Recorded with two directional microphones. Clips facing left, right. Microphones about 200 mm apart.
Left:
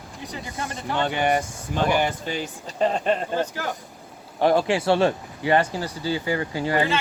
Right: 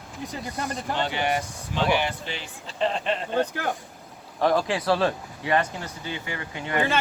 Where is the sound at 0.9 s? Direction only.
50° left (ahead or behind).